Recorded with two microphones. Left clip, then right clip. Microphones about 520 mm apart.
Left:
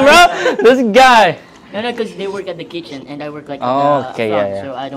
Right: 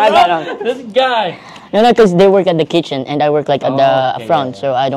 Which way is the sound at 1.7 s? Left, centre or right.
Right.